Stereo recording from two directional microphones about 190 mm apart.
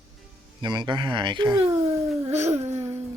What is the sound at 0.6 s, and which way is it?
Speech, 25° right (ahead or behind).